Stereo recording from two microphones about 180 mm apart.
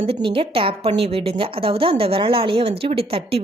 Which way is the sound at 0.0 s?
30° right (ahead or behind).